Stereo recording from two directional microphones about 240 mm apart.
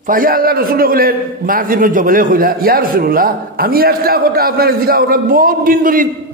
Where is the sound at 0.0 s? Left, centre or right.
Right.